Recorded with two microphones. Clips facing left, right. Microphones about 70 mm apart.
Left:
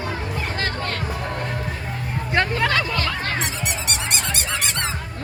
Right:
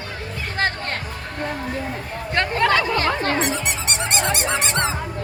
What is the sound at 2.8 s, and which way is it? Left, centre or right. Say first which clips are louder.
Squeak: right 3 dB; right.